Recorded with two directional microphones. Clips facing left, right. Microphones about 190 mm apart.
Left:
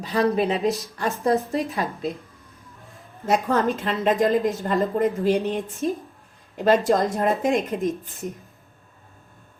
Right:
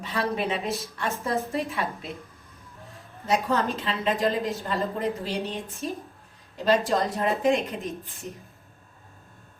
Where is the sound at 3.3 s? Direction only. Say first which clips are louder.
Left 4 dB; 50° left (ahead or behind).